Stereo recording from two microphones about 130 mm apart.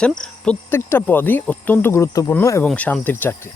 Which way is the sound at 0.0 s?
5° left (ahead or behind).